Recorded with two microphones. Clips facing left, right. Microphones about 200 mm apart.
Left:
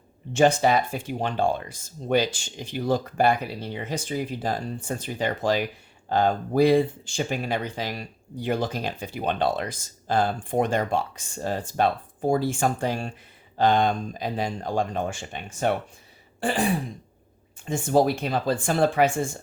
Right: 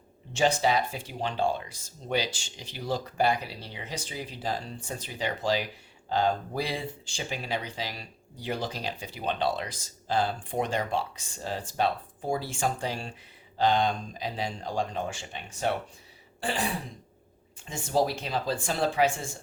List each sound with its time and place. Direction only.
0.3 s speech: 50° left (ahead or behind)
17.7 s speech: 55° left (ahead or behind)